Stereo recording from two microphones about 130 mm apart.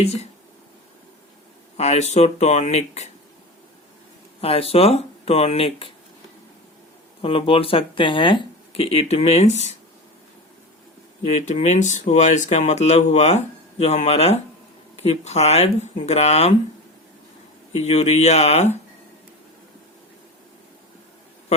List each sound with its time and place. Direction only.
0.0 s speech: 55° left (ahead or behind)
1.7 s speech: 60° left (ahead or behind)
4.4 s speech: 50° left (ahead or behind)
7.2 s speech: 45° left (ahead or behind)
11.2 s speech: 60° left (ahead or behind)
17.7 s speech: 55° left (ahead or behind)